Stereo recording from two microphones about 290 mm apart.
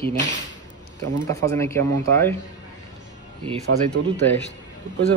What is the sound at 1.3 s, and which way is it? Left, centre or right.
A man's voice, centre.